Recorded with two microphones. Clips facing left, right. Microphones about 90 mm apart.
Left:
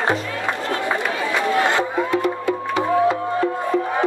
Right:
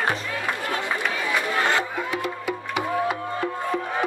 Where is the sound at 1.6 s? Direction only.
20° left (ahead or behind).